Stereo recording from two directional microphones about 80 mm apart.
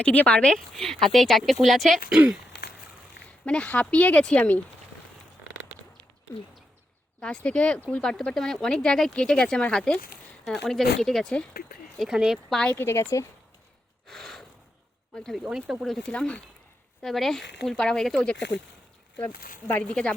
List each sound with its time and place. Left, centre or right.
0.0 s speech: centre
3.4 s speech: centre
7.2 s speech: centre
12.5 s speech: centre
12.7 s speech: left
14.1 s gasp: centre
15.1 s speech: centre
15.4 s speech: centre
16.1 s speech: centre
17.0 s speech: centre
19.1 s speech: left
19.8 s speech: centre